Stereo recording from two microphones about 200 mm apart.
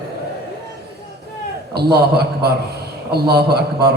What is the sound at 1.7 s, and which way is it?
A man's voice, 55° right (ahead or behind).